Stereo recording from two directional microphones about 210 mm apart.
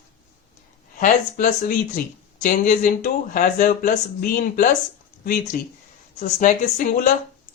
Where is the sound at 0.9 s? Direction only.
35° left (ahead or behind).